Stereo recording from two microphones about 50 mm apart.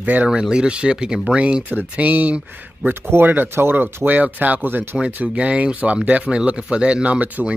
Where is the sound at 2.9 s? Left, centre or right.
Right.